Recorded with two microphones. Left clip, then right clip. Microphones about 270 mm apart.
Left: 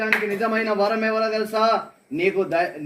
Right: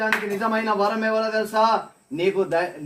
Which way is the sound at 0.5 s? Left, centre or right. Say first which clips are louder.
Even; centre.